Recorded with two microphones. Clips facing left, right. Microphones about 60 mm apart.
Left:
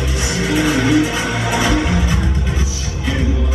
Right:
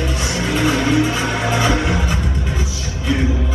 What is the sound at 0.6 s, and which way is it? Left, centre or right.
Music, centre.